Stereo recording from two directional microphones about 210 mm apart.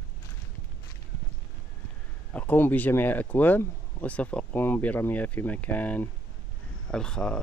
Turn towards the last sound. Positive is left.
turn(degrees=5)  # may be behind; listen again after turning